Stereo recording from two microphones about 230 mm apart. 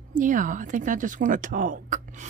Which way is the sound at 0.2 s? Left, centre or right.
Right.